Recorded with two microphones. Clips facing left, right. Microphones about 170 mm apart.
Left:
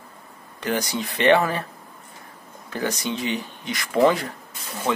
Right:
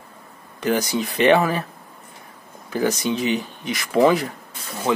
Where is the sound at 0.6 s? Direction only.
15° right (ahead or behind).